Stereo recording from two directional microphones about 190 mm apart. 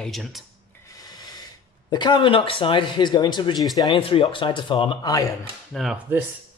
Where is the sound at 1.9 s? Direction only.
25° left (ahead or behind).